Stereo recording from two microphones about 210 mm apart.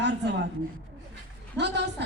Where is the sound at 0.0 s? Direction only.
55° right (ahead or behind).